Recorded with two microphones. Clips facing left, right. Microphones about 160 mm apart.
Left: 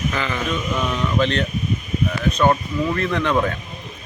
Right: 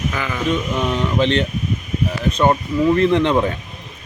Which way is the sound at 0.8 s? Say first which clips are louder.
Right 2 dB; 30° right (ahead or behind).